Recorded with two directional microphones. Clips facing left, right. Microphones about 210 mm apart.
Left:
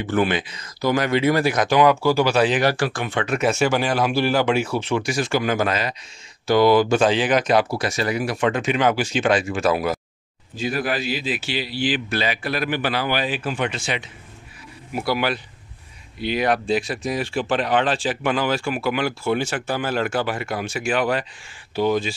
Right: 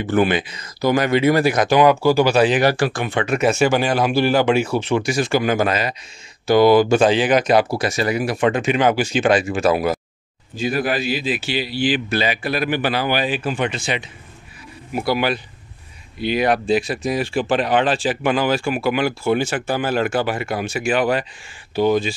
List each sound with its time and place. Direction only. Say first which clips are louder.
0.0 s speech: right 3 dB; 10° right (ahead or behind)
4.7 s speech: right 3 dB; 30° right (ahead or behind)
5.0 s speech: right 3 dB; 5° right (ahead or behind)
9.7 s speech: right 3 dB; 45° right (ahead or behind)
10.6 s speech: right 3 dB; 10° right (ahead or behind)
13.5 s speech: right 3 dB; centre (ahead or behind)
16.2 s speech: right 3 dB; 10° right (ahead or behind)